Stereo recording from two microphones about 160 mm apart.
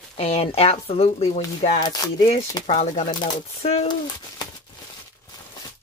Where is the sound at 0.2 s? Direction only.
40° left (ahead or behind).